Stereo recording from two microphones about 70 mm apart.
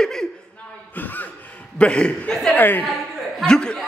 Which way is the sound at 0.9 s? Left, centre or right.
Left.